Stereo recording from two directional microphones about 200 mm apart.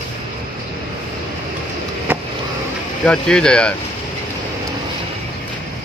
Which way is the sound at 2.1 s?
10° right (ahead or behind).